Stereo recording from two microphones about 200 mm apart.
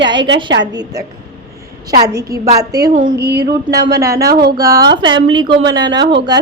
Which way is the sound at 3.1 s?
55° right (ahead or behind).